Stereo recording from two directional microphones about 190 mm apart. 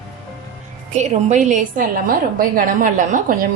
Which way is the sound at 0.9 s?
40° right (ahead or behind).